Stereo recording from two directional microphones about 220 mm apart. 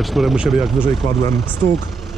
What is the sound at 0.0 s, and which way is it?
Speech, centre (ahead or behind).